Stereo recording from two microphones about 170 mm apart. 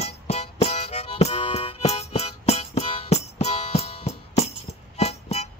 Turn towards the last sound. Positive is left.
turn(degrees=40)  # may be behind; listen again after turning